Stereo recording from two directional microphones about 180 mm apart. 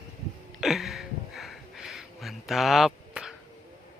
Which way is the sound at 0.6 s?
Centre (ahead or behind).